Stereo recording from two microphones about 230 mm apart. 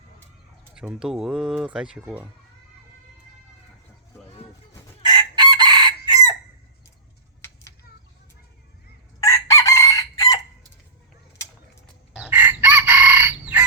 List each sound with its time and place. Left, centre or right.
0.8 s speech: centre
5.0 s chicken: centre
9.2 s chicken: centre
12.3 s chicken: centre